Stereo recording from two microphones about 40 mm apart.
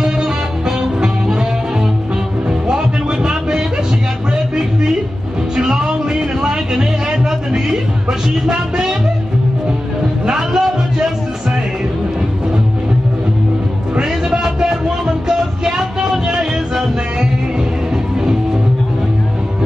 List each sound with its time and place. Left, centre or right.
0.0 s music: centre
2.7 s a sound: right
5.6 s music: centre
10.2 s music: centre
13.9 s music: centre